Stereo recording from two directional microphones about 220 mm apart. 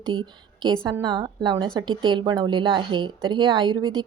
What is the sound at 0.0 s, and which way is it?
A woman's voice, 20° right (ahead or behind).